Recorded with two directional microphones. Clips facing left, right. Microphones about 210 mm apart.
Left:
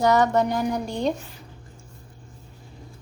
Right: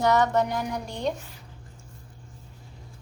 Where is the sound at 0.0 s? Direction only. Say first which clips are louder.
Left 3 dB; 35° left (ahead or behind).